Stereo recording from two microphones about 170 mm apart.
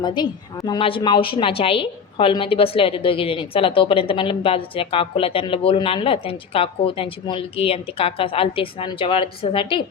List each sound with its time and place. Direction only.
0.0 s a woman's voice: 25° left (ahead or behind)